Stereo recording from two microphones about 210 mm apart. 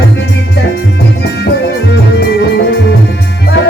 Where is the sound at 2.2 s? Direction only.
50° left (ahead or behind).